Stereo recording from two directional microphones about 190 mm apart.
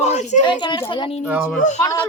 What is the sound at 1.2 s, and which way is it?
Speech, 5° right (ahead or behind).